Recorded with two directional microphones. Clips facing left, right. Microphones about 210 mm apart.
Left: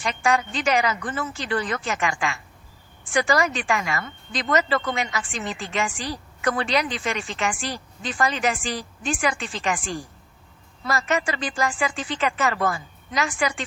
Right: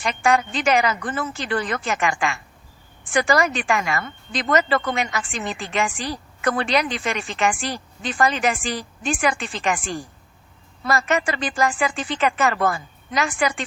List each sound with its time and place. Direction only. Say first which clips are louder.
0.2 s a woman's voice: right 3 dB; 55° right (ahead or behind)